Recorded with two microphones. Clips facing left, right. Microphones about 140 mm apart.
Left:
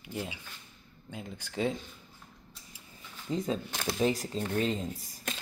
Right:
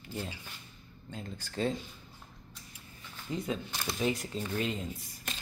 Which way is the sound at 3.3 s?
35° left (ahead or behind).